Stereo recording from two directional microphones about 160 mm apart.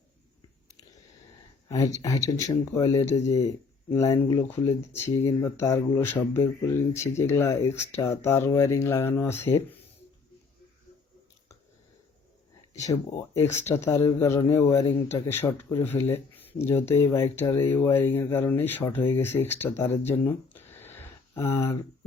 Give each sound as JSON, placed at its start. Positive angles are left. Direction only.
{"t": 1.7, "sound": "speech", "side_deg": 20}
{"t": 13.3, "sound": "speech", "side_deg": 15}